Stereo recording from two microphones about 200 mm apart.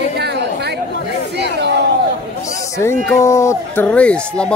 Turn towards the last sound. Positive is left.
turn(degrees=5)  # may be behind; listen again after turning